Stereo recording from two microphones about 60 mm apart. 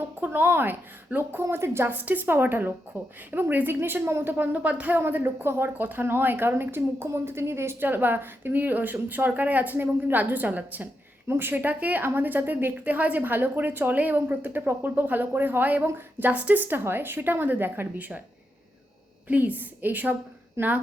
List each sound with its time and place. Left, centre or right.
0.2 s a woman's voice: right
1.9 s a woman's voice: right
4.9 s a woman's voice: right
7.9 s a woman's voice: right
11.3 s a woman's voice: right
19.3 s a woman's voice: right